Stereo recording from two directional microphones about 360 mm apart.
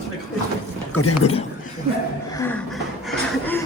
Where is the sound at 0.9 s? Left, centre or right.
Left.